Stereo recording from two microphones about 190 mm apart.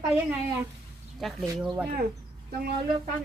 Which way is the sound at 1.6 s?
5° right (ahead or behind).